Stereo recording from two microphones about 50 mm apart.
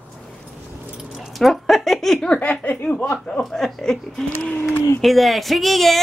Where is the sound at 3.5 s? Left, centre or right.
Centre.